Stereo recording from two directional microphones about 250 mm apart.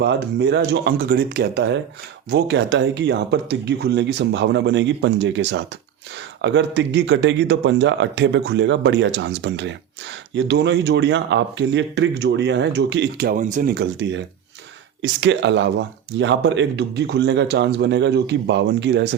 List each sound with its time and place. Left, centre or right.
0.0 s speech: right